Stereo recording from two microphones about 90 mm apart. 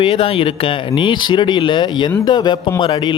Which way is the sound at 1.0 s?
60° left (ahead or behind).